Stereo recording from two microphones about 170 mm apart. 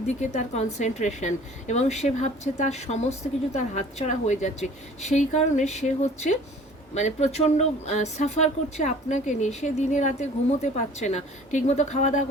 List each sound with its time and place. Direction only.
0.2 s a woman's voice: 45° left (ahead or behind)